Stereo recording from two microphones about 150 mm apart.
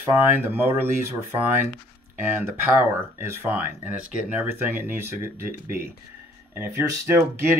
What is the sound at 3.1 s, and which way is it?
Speech, 15° right (ahead or behind).